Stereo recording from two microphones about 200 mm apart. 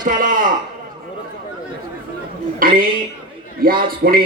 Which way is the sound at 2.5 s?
45° right (ahead or behind).